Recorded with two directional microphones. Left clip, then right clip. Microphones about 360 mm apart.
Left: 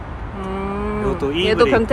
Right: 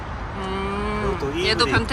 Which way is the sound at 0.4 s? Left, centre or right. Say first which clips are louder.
Left 2 dB; centre.